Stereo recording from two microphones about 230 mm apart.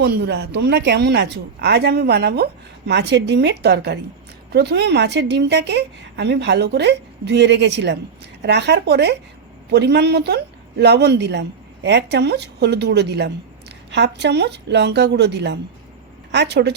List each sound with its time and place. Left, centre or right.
0.0 s speech: right